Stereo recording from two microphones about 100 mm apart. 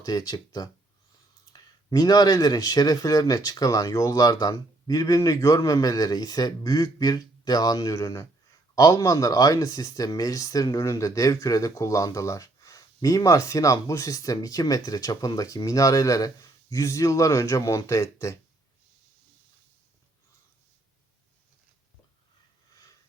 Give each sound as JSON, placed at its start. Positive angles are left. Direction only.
{"t": 0.0, "sound": "speech", "side_deg": 40}